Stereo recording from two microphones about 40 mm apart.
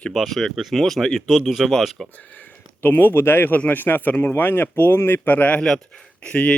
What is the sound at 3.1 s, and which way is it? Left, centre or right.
Speech, left.